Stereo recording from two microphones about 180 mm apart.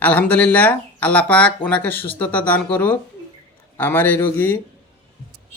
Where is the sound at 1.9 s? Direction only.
65° right (ahead or behind).